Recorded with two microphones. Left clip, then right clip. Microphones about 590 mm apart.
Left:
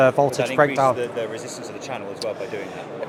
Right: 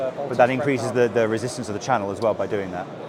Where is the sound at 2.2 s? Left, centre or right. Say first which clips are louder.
Right 6 dB; right.